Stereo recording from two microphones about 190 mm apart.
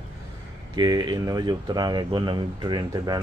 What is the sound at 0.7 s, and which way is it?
Speech, 20° right (ahead or behind).